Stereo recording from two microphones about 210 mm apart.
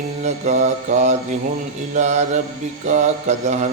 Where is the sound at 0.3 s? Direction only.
30° right (ahead or behind).